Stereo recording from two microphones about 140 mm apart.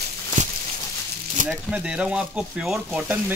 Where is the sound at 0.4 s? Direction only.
60° right (ahead or behind).